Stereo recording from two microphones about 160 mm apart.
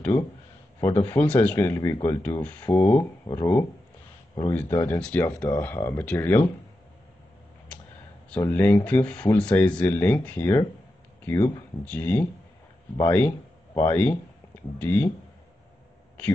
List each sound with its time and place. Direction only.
0.7 s speech: 15° left (ahead or behind)
8.4 s speech: 15° left (ahead or behind)